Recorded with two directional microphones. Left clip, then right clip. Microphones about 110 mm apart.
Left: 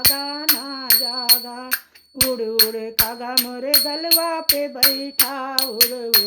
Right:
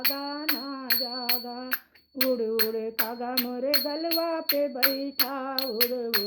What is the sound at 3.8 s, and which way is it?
Music, 25° left (ahead or behind).